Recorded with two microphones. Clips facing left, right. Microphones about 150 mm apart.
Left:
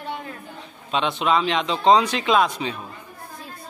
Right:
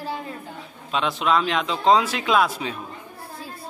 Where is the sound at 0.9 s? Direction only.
Centre (ahead or behind).